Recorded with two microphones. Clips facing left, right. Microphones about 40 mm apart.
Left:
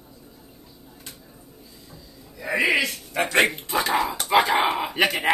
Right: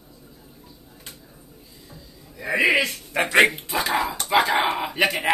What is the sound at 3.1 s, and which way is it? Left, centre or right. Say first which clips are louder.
Speech: right 3 dB; centre.